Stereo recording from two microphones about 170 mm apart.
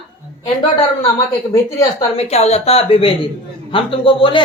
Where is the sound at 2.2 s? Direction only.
40° left (ahead or behind).